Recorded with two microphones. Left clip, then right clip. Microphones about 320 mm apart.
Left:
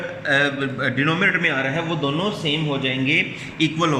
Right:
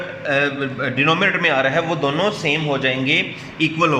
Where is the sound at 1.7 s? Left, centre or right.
Right.